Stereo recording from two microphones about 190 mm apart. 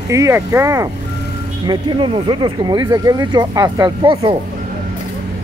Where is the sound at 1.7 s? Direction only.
25° right (ahead or behind).